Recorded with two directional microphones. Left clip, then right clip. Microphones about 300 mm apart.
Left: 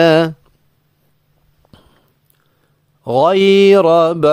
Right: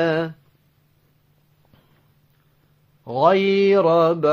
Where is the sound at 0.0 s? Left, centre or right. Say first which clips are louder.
Left 10 dB; left.